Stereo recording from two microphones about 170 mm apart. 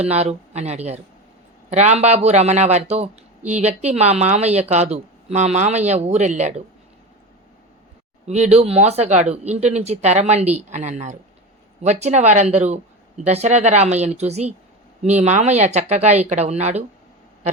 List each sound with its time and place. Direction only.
0.0 s speech: 40° right (ahead or behind)
8.3 s speech: 40° right (ahead or behind)